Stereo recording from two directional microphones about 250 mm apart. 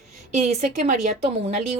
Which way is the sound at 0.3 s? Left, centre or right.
Right.